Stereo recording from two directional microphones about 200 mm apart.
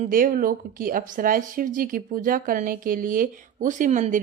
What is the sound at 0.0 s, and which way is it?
A woman's voice, 45° right (ahead or behind).